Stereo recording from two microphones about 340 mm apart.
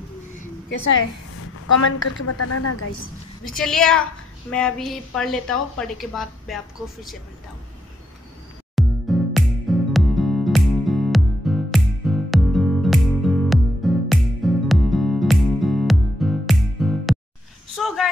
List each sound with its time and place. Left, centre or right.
1.9 s a woman's voice: left
3.4 s a woman's voice: centre
8.7 s music: centre
17.7 s a sound: centre